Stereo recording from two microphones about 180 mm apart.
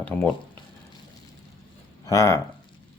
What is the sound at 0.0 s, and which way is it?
Speech, 10° left (ahead or behind).